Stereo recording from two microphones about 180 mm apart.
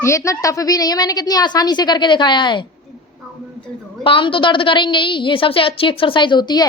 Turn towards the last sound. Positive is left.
turn(degrees=25)  # may be behind; listen again after turning